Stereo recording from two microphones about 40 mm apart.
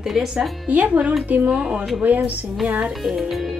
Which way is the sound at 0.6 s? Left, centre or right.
Right.